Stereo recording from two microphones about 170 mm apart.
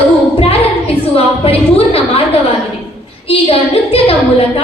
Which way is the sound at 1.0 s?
35° left (ahead or behind).